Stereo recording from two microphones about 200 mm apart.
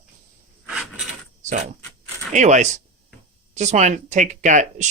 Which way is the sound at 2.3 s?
35° right (ahead or behind).